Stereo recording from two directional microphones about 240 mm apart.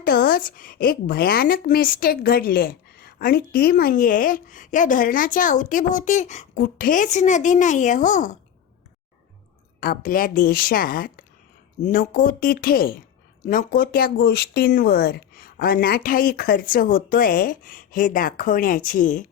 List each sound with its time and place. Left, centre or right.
0.0 s a woman's voice: left
9.8 s a woman's voice: left